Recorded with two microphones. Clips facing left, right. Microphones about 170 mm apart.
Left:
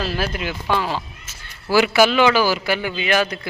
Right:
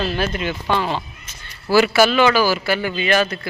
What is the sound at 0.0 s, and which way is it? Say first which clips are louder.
A man's voice: right 2 dB; 5° left (ahead or behind).